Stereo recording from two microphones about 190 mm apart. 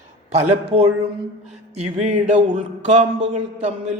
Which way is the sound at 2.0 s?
40° right (ahead or behind).